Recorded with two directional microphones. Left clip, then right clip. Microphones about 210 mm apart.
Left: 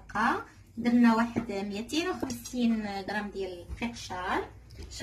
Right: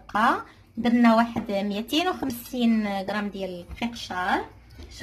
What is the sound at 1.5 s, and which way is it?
A woman's voice, 40° right (ahead or behind).